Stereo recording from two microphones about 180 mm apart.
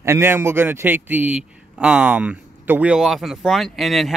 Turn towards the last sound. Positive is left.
turn(degrees=0)  # may be behind; listen again after turning